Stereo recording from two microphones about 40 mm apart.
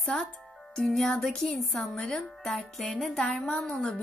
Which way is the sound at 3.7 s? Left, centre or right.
Centre.